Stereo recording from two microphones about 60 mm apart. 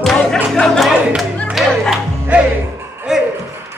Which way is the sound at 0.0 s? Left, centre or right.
Centre.